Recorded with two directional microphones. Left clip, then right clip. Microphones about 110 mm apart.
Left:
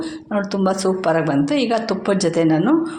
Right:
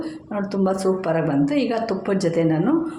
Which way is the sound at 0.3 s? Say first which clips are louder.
Left 3 dB; 20° left (ahead or behind).